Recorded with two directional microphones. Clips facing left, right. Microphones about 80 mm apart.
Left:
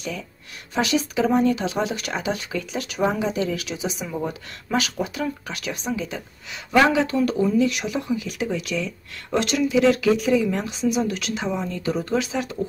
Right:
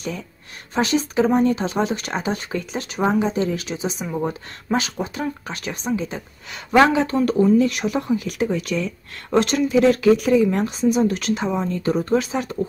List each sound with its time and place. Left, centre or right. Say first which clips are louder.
0.7 s speech: right 3 dB; right